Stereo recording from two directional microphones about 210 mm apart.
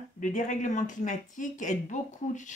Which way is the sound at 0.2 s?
40° left (ahead or behind).